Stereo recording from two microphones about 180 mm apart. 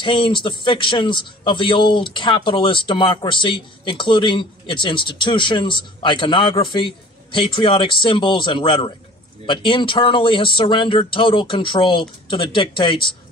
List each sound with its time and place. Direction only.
0.0 s a man's voice: 25° left (ahead or behind)